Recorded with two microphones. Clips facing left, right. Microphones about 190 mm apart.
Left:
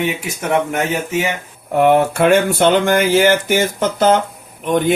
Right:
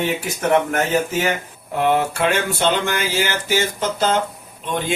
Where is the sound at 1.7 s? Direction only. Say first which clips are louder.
Left 6 dB; 55° left (ahead or behind).